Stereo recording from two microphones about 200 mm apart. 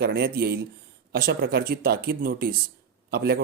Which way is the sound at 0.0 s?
50° right (ahead or behind).